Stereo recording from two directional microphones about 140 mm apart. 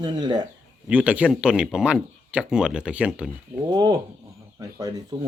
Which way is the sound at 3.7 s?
30° right (ahead or behind).